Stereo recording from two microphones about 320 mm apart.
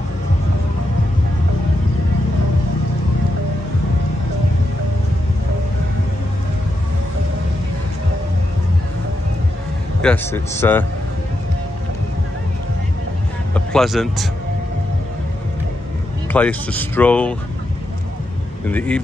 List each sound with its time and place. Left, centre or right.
10.0 s a man's voice: centre
13.7 s speech: centre
16.3 s speech: centre
18.7 s speech: centre